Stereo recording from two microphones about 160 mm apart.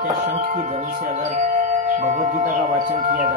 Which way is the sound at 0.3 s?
40° right (ahead or behind).